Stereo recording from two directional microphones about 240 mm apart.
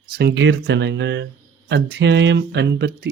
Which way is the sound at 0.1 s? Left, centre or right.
Right.